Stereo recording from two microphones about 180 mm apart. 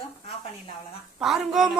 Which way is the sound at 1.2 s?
Centre (ahead or behind).